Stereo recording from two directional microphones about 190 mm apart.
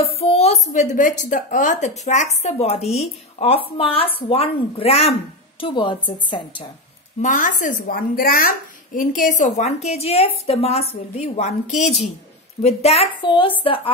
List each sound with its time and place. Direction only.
0.0 s a woman's voice: 30° left (ahead or behind)
7.2 s a woman's voice: 40° left (ahead or behind); by 13.5 s 25° left (ahead or behind)